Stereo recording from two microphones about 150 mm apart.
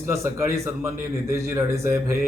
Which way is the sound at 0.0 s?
20° right (ahead or behind).